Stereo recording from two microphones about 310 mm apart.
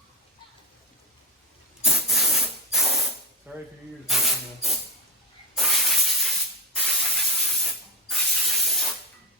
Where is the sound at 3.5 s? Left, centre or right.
Centre.